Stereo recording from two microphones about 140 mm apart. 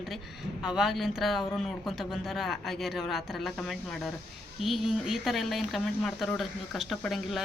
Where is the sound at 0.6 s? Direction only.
5° right (ahead or behind).